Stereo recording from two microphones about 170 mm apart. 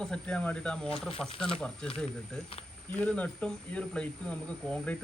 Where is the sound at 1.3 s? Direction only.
30° left (ahead or behind).